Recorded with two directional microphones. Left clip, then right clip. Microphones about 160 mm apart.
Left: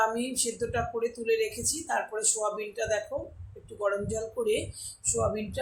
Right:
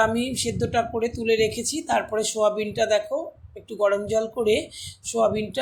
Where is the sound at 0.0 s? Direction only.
45° right (ahead or behind).